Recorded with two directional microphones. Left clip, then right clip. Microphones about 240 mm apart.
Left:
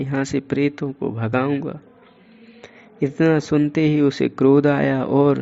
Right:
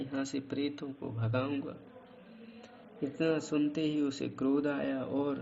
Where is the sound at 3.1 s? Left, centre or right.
Left.